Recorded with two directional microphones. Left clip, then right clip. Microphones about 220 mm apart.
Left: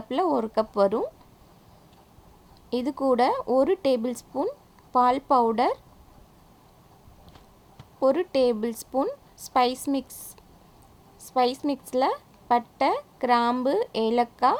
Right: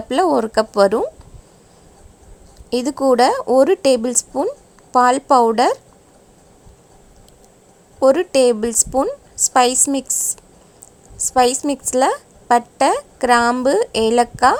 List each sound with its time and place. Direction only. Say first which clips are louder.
0.1 s a woman's voice: right 9 dB; 25° right (ahead or behind)
2.6 s a woman's voice: right 8 dB; 20° right (ahead or behind)
7.9 s a woman's voice: right 9 dB; 20° right (ahead or behind)